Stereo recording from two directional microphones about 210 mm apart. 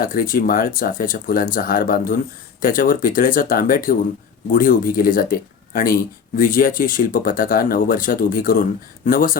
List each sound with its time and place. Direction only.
0.0 s a man's voice: 40° left (ahead or behind)